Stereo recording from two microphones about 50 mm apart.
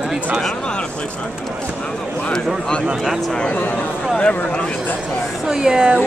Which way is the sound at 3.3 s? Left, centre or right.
Left.